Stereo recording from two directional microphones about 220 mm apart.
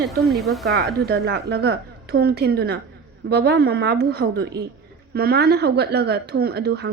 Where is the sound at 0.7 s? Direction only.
45° right (ahead or behind).